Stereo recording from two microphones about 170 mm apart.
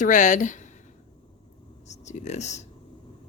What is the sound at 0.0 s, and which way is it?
Speech, 45° left (ahead or behind).